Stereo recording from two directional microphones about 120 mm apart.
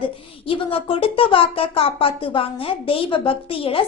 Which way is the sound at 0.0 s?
50° left (ahead or behind).